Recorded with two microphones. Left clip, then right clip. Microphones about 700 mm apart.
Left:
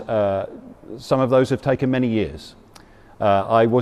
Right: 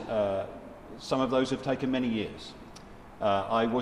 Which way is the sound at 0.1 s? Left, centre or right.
Left.